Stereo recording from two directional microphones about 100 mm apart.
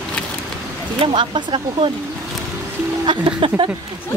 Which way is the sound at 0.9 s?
55° right (ahead or behind).